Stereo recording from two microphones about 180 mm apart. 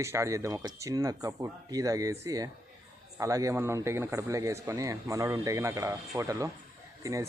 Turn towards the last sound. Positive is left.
turn(degrees=-20)  # may be behind; listen again after turning